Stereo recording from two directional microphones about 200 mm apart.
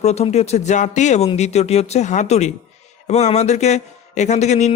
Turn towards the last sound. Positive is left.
turn(degrees=35)  # may be behind; listen again after turning